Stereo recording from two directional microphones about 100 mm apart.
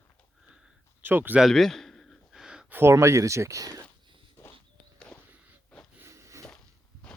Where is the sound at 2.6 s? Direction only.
25° right (ahead or behind).